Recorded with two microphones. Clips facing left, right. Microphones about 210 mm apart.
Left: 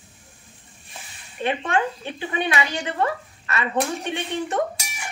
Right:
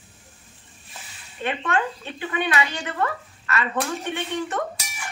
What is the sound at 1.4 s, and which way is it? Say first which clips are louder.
A woman's voice: left 2 dB; 15° left (ahead or behind).